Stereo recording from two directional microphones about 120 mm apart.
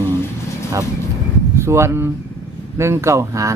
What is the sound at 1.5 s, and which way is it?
Speech, 20° right (ahead or behind).